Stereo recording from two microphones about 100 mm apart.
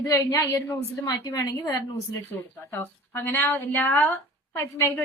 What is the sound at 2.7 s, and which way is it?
Speech, 20° left (ahead or behind).